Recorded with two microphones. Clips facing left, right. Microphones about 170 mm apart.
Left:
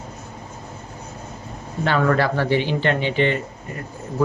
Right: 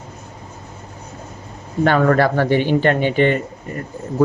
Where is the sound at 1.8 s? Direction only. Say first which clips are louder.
Right 5 dB; 50° right (ahead or behind).